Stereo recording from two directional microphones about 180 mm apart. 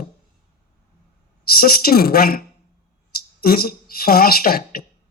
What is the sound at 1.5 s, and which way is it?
Speech, 55° left (ahead or behind).